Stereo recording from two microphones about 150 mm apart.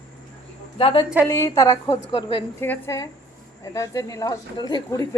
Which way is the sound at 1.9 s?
35° left (ahead or behind).